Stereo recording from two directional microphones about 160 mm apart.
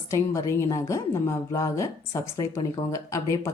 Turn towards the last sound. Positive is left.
turn(degrees=20)  # may be behind; listen again after turning